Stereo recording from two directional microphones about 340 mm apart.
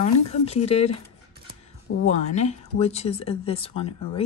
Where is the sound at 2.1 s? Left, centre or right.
Centre.